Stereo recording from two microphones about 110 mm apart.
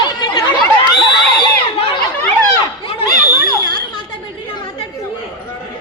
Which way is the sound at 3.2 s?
35° left (ahead or behind).